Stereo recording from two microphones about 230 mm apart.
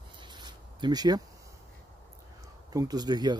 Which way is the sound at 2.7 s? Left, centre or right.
Centre.